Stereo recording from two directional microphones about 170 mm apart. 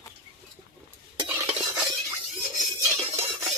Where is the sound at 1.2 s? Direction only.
15° right (ahead or behind).